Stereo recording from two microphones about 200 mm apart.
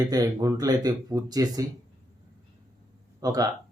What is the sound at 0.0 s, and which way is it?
Speech, 20° right (ahead or behind).